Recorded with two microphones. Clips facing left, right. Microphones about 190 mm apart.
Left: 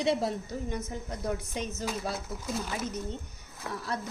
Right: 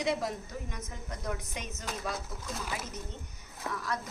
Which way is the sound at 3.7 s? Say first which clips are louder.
Left 1 dB; 30° left (ahead or behind).